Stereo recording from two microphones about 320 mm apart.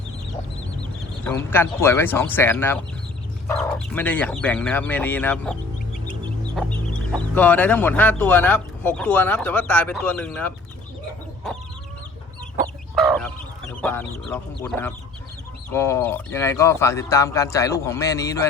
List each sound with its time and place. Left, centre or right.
1.3 s speech: centre
6.6 s speech: centre
13.0 s fowl: centre
13.8 s speech: centre